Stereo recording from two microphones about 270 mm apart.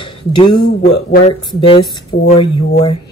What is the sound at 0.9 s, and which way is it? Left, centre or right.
Speech, left.